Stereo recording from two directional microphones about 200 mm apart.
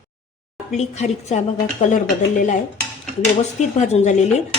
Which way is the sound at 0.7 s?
35° left (ahead or behind).